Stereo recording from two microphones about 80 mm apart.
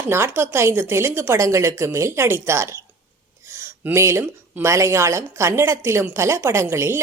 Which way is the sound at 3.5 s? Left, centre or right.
Right.